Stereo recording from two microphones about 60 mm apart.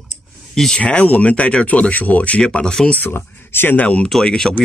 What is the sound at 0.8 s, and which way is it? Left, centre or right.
Speech, left.